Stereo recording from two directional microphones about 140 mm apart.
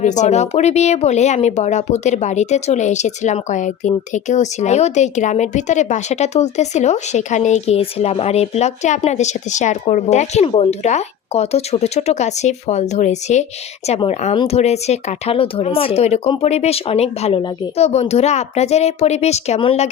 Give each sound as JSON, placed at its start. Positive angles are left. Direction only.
{"t": 0.0, "sound": "speech", "side_deg": 60}